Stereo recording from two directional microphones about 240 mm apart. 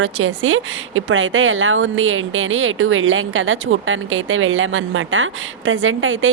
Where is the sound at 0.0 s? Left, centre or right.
Right.